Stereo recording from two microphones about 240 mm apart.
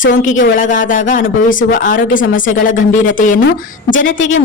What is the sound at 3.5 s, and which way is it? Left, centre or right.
Speech, left.